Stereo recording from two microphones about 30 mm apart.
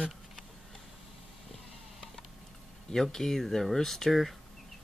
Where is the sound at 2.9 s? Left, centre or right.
Centre.